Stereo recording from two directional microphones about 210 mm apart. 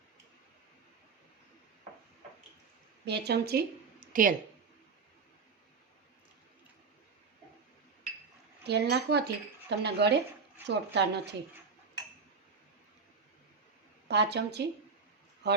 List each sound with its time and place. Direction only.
3.1 s speech: 50° right (ahead or behind)
4.0 s a sound: 40° right (ahead or behind)
8.6 s speech: 50° right (ahead or behind)
14.1 s speech: 55° right (ahead or behind)